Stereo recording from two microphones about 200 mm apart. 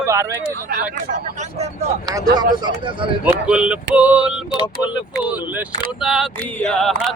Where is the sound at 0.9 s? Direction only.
40° right (ahead or behind); by 3.0 s 25° right (ahead or behind).